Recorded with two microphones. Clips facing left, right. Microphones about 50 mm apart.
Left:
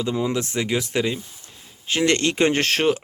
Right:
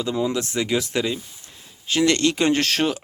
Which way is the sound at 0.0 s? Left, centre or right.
Left.